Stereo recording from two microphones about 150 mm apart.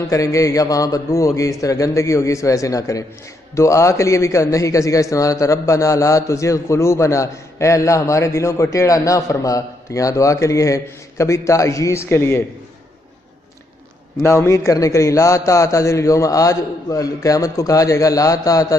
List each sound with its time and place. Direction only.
0.1 s a man's voice: 20° left (ahead or behind)
14.2 s a man's voice: 20° left (ahead or behind)